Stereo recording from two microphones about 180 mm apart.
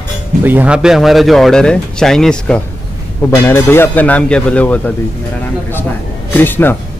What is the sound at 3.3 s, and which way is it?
Speech, 15° left (ahead or behind).